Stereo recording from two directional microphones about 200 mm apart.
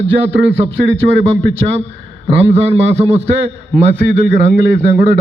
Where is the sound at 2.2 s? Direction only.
30° right (ahead or behind).